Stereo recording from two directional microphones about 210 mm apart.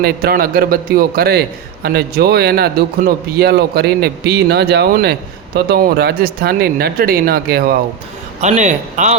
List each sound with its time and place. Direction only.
0.0 s a man's voice: 45° right (ahead or behind)
8.4 s speech: 35° right (ahead or behind)